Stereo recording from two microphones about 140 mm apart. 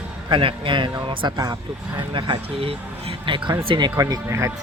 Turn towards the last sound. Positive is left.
turn(degrees=-20)  # may be behind; listen again after turning